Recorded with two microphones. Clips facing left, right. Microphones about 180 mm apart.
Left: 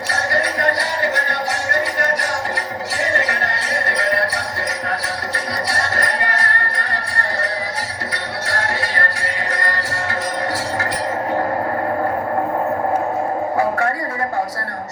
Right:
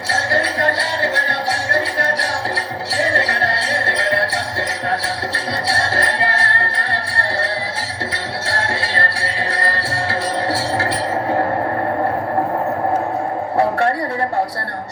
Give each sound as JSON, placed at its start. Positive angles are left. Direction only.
{"t": 0.1, "sound": "music", "side_deg": -30}
{"t": 5.6, "sound": "music", "side_deg": -30}
{"t": 8.4, "sound": "music", "side_deg": -30}
{"t": 13.6, "sound": "a sound", "side_deg": -35}